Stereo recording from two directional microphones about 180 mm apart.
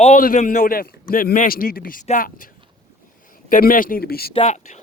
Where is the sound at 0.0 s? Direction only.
45° left (ahead or behind).